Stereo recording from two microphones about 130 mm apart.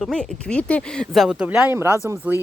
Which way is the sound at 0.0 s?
5° left (ahead or behind).